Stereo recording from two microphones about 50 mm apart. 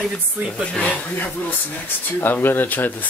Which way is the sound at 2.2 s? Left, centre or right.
Left.